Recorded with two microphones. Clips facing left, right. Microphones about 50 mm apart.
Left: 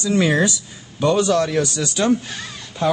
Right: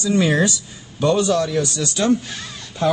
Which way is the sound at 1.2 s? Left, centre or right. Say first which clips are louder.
Left 1 dB; left.